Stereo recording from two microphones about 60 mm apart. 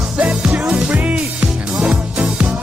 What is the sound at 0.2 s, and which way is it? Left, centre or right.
Music, centre.